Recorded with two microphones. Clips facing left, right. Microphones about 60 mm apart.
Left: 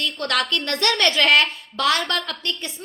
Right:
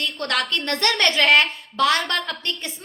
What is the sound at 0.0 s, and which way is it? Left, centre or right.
A woman's voice, right.